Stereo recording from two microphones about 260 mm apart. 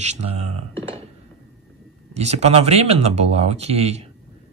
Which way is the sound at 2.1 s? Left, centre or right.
Right.